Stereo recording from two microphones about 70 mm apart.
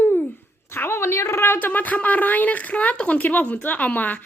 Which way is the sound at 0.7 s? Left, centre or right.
Left.